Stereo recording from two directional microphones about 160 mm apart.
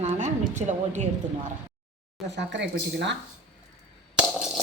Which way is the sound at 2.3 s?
90° right.